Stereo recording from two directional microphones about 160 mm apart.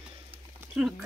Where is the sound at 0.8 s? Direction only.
Centre (ahead or behind).